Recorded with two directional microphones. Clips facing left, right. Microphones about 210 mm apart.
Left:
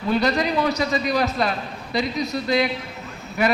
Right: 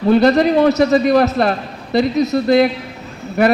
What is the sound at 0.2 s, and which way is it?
A man's voice, 50° right (ahead or behind).